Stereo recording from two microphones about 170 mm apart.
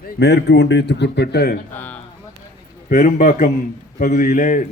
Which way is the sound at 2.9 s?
50° left (ahead or behind).